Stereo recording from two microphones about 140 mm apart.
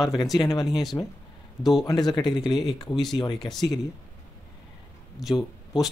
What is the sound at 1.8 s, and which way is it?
A man's voice, 30° left (ahead or behind).